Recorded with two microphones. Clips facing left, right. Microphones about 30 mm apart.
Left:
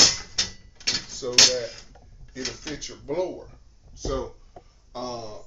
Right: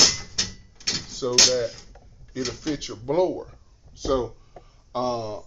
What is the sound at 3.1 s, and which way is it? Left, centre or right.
Speech, right.